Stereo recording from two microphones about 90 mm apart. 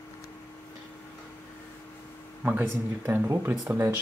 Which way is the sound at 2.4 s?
20° right (ahead or behind).